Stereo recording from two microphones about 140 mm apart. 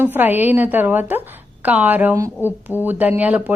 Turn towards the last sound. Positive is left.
turn(degrees=-10)  # may be behind; listen again after turning